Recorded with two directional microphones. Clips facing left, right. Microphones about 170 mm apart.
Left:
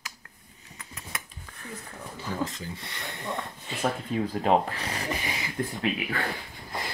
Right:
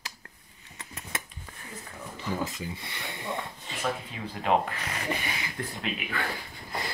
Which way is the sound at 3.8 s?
35° left (ahead or behind).